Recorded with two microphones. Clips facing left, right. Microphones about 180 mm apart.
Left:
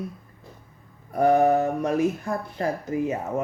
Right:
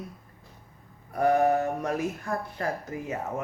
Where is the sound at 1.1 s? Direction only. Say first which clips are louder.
Left 4 dB; 25° left (ahead or behind).